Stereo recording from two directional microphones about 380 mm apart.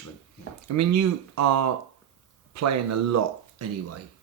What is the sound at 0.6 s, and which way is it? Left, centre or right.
Speech, right.